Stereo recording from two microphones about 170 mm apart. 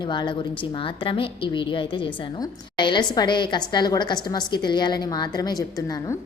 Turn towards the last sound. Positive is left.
turn(degrees=20)  # may be behind; listen again after turning